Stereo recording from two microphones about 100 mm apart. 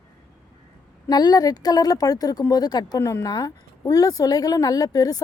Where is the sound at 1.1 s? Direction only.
40° left (ahead or behind).